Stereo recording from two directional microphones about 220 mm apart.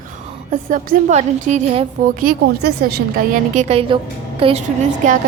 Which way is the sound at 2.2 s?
45° right (ahead or behind).